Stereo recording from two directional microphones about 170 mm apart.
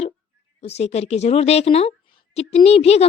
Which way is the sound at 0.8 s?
40° left (ahead or behind).